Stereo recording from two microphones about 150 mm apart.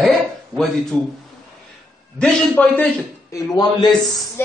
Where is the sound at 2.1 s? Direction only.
10° left (ahead or behind).